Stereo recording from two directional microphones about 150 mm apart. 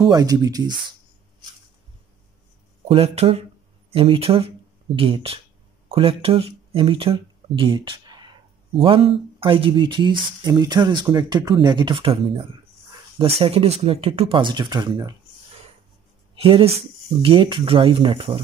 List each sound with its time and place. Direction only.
0.0 s speech: 25° right (ahead or behind)
2.9 s speech: 40° right (ahead or behind)
16.3 s speech: 40° right (ahead or behind)